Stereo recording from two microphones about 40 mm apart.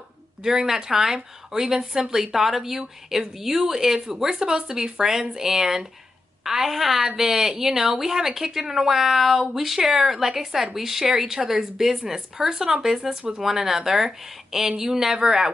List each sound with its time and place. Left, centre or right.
0.4 s a woman's voice: centre